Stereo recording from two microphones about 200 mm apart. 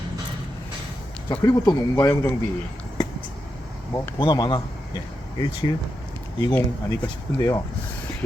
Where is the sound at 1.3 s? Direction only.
15° left (ahead or behind).